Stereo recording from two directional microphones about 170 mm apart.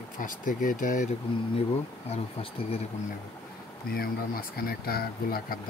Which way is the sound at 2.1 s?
35° left (ahead or behind).